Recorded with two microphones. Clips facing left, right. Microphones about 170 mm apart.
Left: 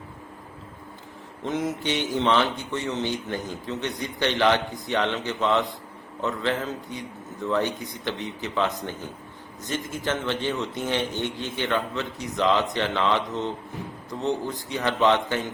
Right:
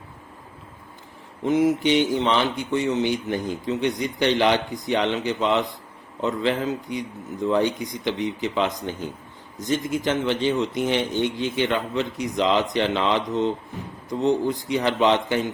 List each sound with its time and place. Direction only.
1.5 s a man's voice: 10° right (ahead or behind)